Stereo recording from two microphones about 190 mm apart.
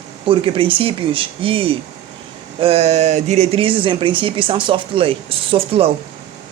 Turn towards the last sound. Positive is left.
turn(degrees=-30)  # may be behind; listen again after turning